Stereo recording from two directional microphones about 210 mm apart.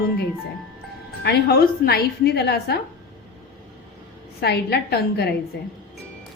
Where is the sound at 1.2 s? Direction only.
50° left (ahead or behind).